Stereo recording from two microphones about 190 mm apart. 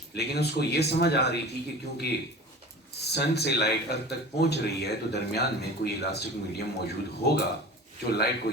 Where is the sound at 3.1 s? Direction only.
60° left (ahead or behind).